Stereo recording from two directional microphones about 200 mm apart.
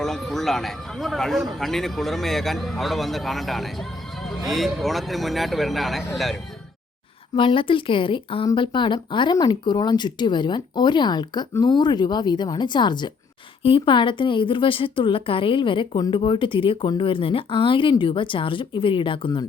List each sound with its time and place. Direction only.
0.0 s speech: centre (ahead or behind)
7.3 s a woman's voice: 25° left (ahead or behind)